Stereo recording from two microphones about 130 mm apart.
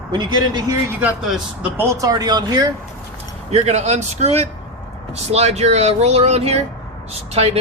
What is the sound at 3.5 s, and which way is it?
A man's voice, 55° right (ahead or behind).